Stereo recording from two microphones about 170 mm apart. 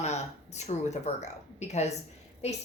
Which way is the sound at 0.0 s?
40° left (ahead or behind).